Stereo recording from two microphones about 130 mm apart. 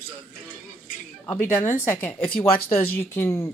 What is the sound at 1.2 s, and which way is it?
Speech, 15° left (ahead or behind).